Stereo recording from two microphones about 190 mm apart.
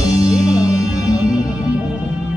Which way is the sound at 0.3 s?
5° right (ahead or behind).